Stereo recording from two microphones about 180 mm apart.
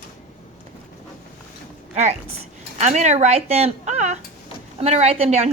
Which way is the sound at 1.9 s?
40° right (ahead or behind).